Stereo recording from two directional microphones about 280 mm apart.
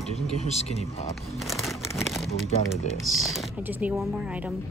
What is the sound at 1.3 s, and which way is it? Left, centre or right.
Speech, centre.